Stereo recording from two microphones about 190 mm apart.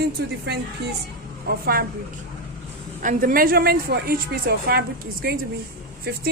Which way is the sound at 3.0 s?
45° right (ahead or behind).